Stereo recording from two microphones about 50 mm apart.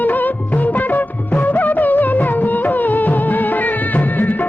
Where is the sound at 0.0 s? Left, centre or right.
Left.